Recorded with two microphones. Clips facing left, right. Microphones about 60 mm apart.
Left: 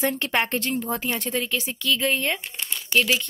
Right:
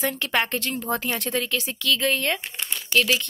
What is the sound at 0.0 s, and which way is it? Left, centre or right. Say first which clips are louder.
Speech: left 1 dB; left.